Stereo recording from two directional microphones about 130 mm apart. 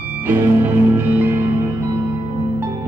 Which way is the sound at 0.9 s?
15° right (ahead or behind).